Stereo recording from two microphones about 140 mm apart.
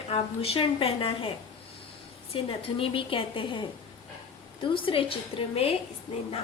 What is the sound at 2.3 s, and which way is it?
A woman's voice, 40° left (ahead or behind).